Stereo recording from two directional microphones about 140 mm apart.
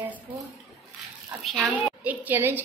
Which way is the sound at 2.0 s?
15° right (ahead or behind).